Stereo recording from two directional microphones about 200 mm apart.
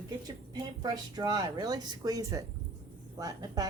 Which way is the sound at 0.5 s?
20° right (ahead or behind).